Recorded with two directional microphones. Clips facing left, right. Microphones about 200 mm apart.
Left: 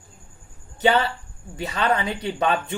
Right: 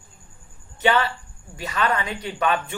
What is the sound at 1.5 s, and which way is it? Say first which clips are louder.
Speech: left 1 dB; 30° left (ahead or behind).